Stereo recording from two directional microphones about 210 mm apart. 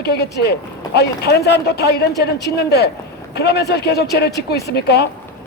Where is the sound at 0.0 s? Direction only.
50° left (ahead or behind).